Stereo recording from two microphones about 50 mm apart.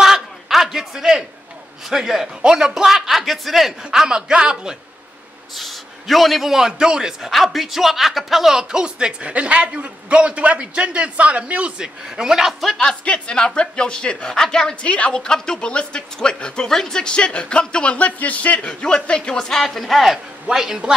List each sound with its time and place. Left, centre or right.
0.0 s a sound: centre
1.9 s a man's voice: centre
5.6 s a man's voice: centre
7.2 s a man's voice: centre; by 11.7 s right
11.8 s a man's voice: centre
13.0 s speech: left
18.7 s a man's voice: centre